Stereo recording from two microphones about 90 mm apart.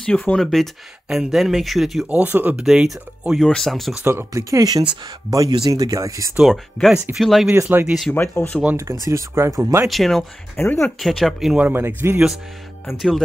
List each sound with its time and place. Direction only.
0.0 s speech: 10° left (ahead or behind)
2.0 s speech: 20° right (ahead or behind)
2.6 s speech: 10° right (ahead or behind)
3.4 s speech: 5° left (ahead or behind)
4.0 s speech: 25° right (ahead or behind)
4.3 s speech: 40° right (ahead or behind)
6.4 s speech: centre (ahead or behind)
8.1 s speech: 25° left (ahead or behind)
9.0 s speech: 35° right (ahead or behind)
9.8 s speech: centre (ahead or behind)
10.5 s speech: 25° left (ahead or behind)
10.8 s speech: centre (ahead or behind)
11.5 s speech: 20° right (ahead or behind)